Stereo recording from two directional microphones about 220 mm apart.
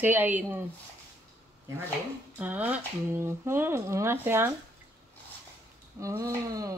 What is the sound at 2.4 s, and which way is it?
A woman's voice, 5° right (ahead or behind).